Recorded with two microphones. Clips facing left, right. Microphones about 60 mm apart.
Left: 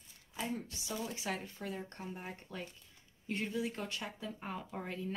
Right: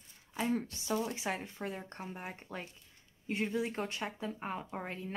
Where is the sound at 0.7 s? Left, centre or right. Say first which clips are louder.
Right 7 dB; right.